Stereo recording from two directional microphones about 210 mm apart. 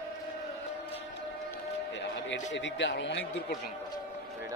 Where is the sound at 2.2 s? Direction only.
60° left (ahead or behind).